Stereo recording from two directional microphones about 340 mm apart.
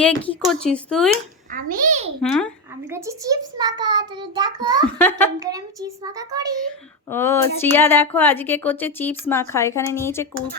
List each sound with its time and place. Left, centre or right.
0.0 s speech: centre
1.5 s a child's voice: right
2.2 s speech: centre
2.9 s a child's voice: centre
4.9 s speech: centre
5.4 s a child's voice: centre
7.1 s a woman's voice: centre